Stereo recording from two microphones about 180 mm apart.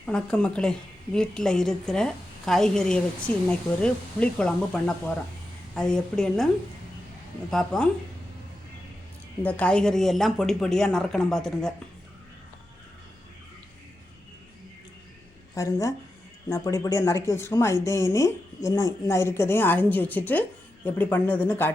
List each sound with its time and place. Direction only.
0.0 s a woman's voice: 5° left (ahead or behind)
7.5 s a woman's voice: 5° left (ahead or behind)
9.4 s a woman's voice: 10° left (ahead or behind)
15.5 s a woman's voice: 15° left (ahead or behind)